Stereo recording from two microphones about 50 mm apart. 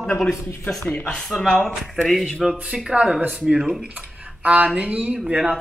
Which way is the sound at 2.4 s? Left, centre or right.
Centre.